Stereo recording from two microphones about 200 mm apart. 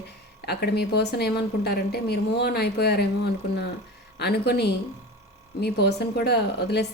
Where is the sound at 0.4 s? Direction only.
55° left (ahead or behind).